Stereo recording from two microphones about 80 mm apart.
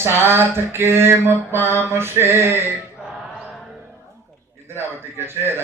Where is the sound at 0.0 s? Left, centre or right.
Right.